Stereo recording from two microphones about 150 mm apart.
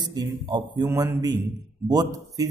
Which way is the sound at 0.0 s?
30° right (ahead or behind).